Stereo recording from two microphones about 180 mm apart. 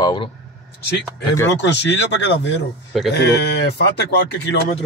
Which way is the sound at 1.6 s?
75° left (ahead or behind).